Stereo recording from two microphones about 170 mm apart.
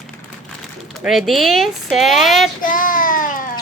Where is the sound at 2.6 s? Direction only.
55° left (ahead or behind).